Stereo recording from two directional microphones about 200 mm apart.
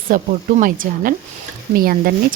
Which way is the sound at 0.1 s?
40° right (ahead or behind).